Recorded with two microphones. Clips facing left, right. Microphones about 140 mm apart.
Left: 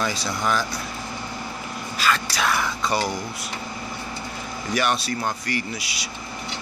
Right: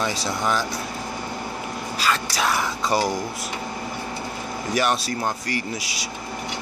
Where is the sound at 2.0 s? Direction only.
30° right (ahead or behind).